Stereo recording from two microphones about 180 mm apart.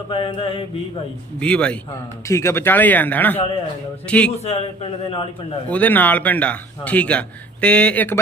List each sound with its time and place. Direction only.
0.1 s mantra: 30° left (ahead or behind)
1.4 s a man's voice: 5° left (ahead or behind)
4.4 s a man's voice: 35° left (ahead or behind)
5.7 s a man's voice: 10° left (ahead or behind)